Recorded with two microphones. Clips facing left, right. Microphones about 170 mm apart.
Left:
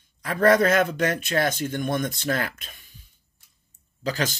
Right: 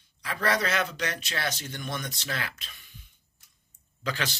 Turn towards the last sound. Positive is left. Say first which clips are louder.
# left 6 dB
turn(degrees=40)  # may be behind; listen again after turning